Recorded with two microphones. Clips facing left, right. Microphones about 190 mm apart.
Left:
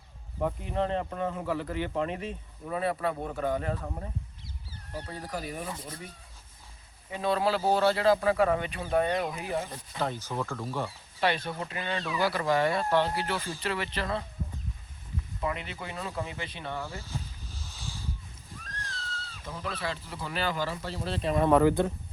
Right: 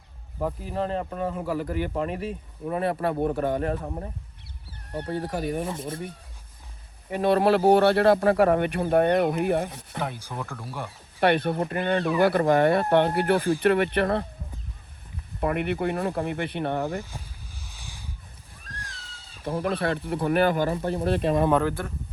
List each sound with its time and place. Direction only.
0.3 s speech: 5° right (ahead or behind)
3.4 s speech: 60° right (ahead or behind)
3.8 s speech: 25° right (ahead or behind)
4.9 s speech: 60° right (ahead or behind)
5.6 s speech: 25° right (ahead or behind)
7.1 s speech: 60° right (ahead or behind)
10.0 s speech: 10° right (ahead or behind)
11.2 s speech: 60° right (ahead or behind)
15.4 s speech: 60° right (ahead or behind)
17.0 s a sound: 15° right (ahead or behind)
19.5 s speech: 55° right (ahead or behind)
21.6 s speech: 15° left (ahead or behind)